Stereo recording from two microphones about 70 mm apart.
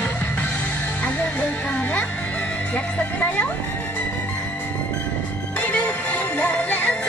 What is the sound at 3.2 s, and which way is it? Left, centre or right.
Music, centre.